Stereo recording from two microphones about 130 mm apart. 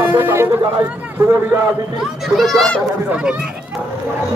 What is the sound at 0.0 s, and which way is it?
Chatter, 15° right (ahead or behind).